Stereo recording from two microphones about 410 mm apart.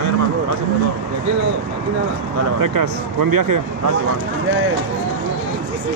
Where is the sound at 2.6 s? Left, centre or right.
Right.